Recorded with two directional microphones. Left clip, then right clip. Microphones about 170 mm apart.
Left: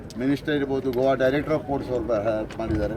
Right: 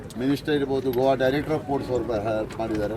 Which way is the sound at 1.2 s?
35° left (ahead or behind).